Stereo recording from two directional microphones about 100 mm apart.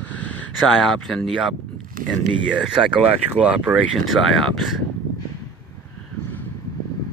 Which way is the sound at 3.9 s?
Centre (ahead or behind).